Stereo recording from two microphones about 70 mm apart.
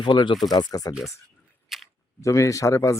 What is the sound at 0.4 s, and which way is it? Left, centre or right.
Speech, left.